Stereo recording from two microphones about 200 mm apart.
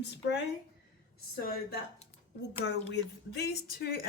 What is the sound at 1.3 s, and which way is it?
Speech, 50° left (ahead or behind).